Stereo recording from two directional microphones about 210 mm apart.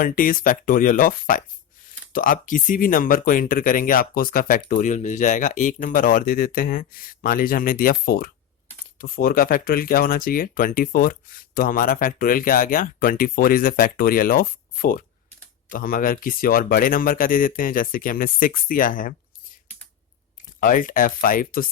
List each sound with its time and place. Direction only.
0.0 s speech: 40° left (ahead or behind)
20.6 s speech: 40° left (ahead or behind)